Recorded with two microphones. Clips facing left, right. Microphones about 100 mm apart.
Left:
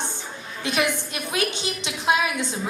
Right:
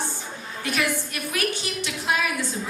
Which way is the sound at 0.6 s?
20° left (ahead or behind).